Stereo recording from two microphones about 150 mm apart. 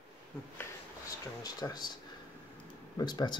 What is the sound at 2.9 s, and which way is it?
Speech, 30° left (ahead or behind).